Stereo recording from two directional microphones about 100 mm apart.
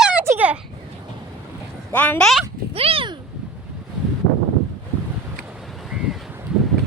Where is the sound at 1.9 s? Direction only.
15° left (ahead or behind).